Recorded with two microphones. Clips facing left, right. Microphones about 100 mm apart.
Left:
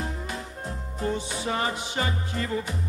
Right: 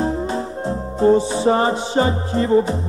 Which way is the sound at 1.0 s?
30° right (ahead or behind).